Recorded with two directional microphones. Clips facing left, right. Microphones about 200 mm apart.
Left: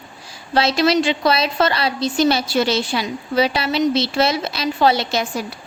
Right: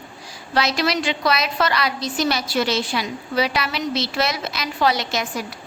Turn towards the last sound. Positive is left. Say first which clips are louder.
# left 3 dB
turn(degrees=30)  # may be behind; listen again after turning